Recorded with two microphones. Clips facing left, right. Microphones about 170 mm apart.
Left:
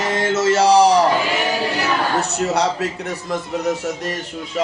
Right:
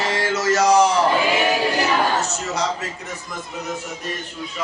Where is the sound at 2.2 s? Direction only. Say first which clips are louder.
Left 5 dB; 60° left (ahead or behind).